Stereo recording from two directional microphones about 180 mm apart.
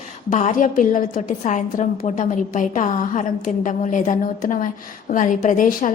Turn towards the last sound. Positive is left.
turn(degrees=45)  # may be behind; listen again after turning